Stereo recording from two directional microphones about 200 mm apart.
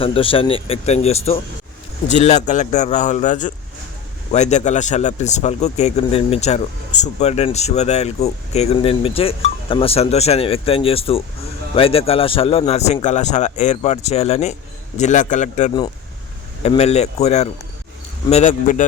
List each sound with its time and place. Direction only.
0.0 s speech: 25° left (ahead or behind)